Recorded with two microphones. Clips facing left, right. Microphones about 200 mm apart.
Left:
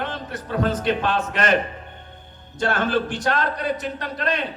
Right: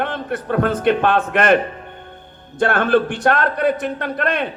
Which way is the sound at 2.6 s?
55° right (ahead or behind).